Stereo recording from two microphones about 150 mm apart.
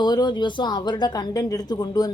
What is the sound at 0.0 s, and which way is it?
A woman's voice, 30° left (ahead or behind).